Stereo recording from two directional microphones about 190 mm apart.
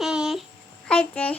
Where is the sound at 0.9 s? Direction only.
5° left (ahead or behind).